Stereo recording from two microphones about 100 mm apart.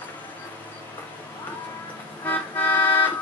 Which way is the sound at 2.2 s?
20° left (ahead or behind).